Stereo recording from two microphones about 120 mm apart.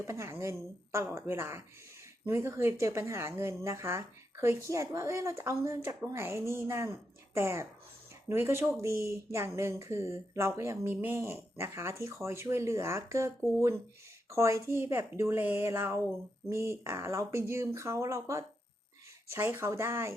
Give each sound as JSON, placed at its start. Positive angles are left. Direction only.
{"t": 0.0, "sound": "speech", "side_deg": -25}